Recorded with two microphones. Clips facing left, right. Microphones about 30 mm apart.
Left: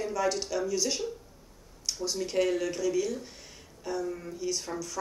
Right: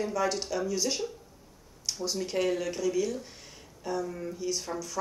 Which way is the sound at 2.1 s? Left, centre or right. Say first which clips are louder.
Left 1 dB; centre.